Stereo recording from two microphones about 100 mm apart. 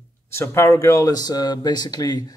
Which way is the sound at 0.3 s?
25° left (ahead or behind).